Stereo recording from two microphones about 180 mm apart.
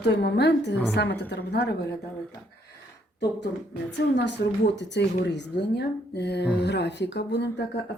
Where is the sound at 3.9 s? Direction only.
75° left (ahead or behind).